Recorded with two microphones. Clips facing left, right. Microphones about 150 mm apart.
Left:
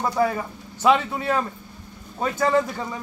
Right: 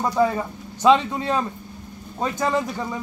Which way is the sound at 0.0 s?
20° right (ahead or behind).